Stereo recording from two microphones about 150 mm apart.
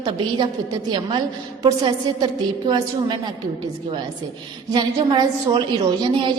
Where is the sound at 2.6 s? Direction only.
30° right (ahead or behind).